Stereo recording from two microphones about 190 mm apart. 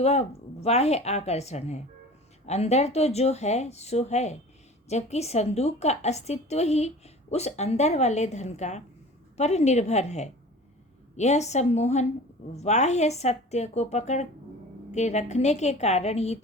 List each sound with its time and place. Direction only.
0.0 s a woman's voice: 35° left (ahead or behind)